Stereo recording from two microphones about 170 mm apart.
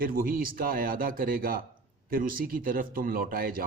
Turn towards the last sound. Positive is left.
turn(degrees=-55)  # may be behind; listen again after turning